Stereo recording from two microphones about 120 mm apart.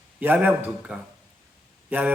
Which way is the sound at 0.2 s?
15° right (ahead or behind).